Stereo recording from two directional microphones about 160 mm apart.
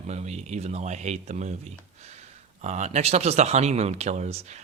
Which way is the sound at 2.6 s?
45° right (ahead or behind).